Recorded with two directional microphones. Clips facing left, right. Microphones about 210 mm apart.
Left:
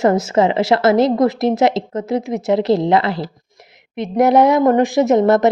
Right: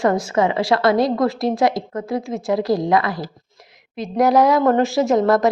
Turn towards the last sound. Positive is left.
turn(degrees=25)  # may be behind; listen again after turning